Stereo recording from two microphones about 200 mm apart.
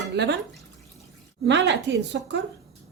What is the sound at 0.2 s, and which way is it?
Speech, 55° right (ahead or behind).